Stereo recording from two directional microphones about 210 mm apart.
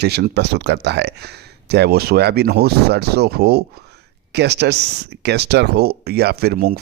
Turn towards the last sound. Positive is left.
turn(degrees=-45)  # may be behind; listen again after turning